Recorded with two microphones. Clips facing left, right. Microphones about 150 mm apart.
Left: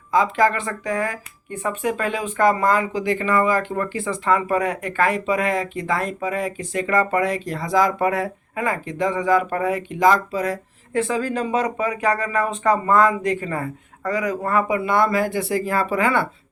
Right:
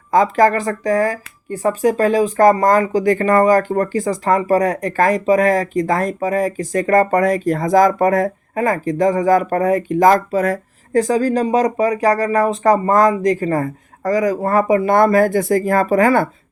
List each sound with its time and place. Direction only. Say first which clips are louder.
0.1 s speech: right 5 dB; 45° right (ahead or behind)